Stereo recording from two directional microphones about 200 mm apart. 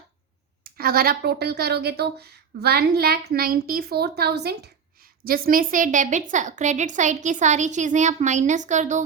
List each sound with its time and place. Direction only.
0.6 s a woman's voice: 50° right (ahead or behind)